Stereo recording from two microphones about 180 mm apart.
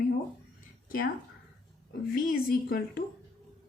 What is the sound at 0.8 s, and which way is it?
Speech, 55° left (ahead or behind).